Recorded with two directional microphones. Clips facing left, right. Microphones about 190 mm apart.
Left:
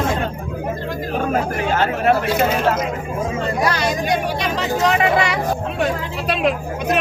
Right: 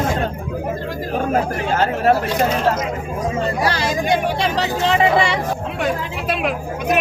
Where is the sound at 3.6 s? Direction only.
30° right (ahead or behind).